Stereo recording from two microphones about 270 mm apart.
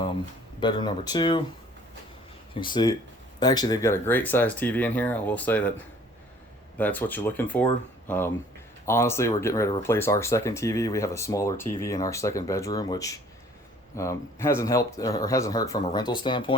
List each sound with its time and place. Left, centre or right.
0.6 s speech: centre
2.6 s speech: centre
6.7 s speech: centre